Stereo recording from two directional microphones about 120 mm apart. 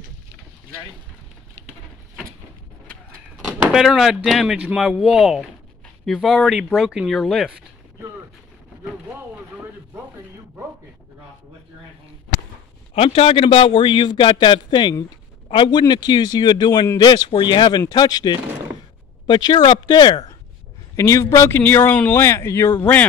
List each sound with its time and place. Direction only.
3.6 s speech: 5° right (ahead or behind)
12.9 s a man's voice: 55° left (ahead or behind)
20.9 s speech: 25° left (ahead or behind)